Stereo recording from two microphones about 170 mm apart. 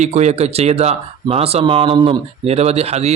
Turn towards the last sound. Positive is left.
turn(degrees=-40)  # may be behind; listen again after turning